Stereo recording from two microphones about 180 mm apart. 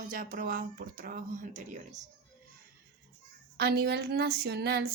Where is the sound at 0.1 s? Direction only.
50° right (ahead or behind).